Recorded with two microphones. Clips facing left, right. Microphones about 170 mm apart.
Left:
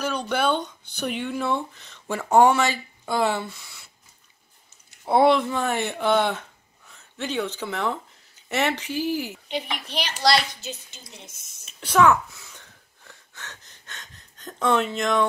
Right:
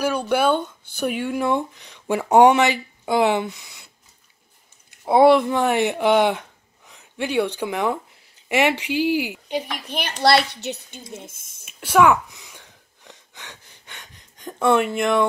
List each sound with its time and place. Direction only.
0.0 s speech: 10° right (ahead or behind)
5.0 s speech: 10° right (ahead or behind)
9.8 s a child's voice: 55° right (ahead or behind)
11.6 s wheeze: 10° right (ahead or behind)